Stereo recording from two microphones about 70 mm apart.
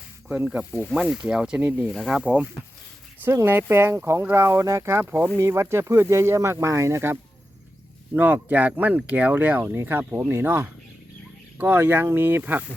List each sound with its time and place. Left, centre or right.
0.3 s speech: centre
3.3 s speech: right
8.1 s speech: right